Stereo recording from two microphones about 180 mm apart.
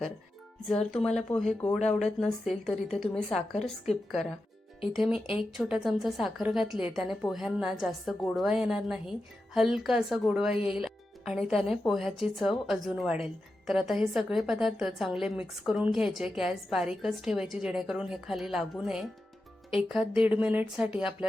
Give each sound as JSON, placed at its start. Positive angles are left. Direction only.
{"t": 0.7, "sound": "speech", "side_deg": 5}
{"t": 1.8, "sound": "speech", "side_deg": 40}
{"t": 2.1, "sound": "speech", "side_deg": 0}
{"t": 4.9, "sound": "speech", "side_deg": -5}